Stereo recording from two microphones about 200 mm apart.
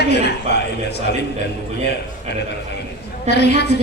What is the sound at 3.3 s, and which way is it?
Speech, 55° left (ahead or behind).